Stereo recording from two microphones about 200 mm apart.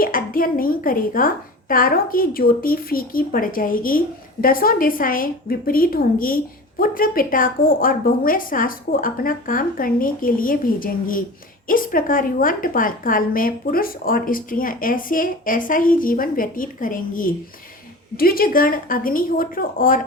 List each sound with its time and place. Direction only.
0.0 s a woman's voice: 45° left (ahead or behind)